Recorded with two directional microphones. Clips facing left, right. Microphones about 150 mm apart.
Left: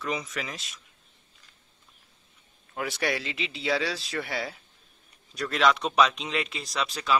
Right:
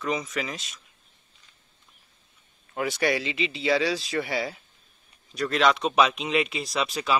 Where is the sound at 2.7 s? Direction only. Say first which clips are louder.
Right 4 dB; centre (ahead or behind).